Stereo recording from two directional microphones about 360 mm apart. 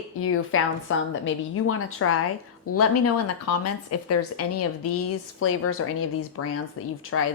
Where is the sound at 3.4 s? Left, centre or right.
Left.